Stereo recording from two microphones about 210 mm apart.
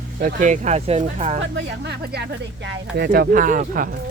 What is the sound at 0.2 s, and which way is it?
Speech, 40° right (ahead or behind).